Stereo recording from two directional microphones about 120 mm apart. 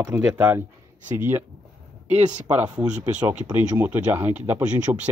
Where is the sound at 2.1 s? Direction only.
80° right.